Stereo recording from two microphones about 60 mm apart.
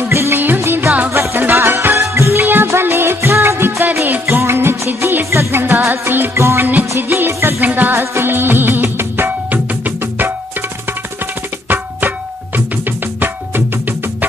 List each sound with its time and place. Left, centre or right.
0.1 s music of bollywood: right
0.6 s music: right
1.4 s music: right
2.0 s music: right
2.4 s music: right
6.3 s music: right
6.6 s music: right